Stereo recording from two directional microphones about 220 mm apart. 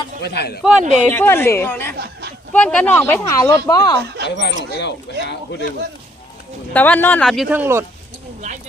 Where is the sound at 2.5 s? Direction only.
5° left (ahead or behind).